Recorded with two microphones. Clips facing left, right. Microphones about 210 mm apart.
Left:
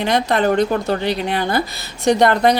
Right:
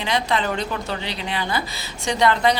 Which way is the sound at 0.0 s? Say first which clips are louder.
Left 6 dB; 55° left (ahead or behind).